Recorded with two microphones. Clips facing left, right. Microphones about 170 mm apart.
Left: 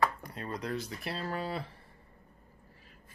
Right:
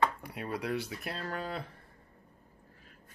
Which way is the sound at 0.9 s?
Centre (ahead or behind).